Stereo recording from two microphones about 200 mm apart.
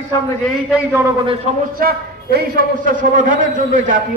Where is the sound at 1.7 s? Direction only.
50° right (ahead or behind).